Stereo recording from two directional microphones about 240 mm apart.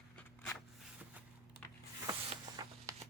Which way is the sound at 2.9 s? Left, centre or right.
Centre.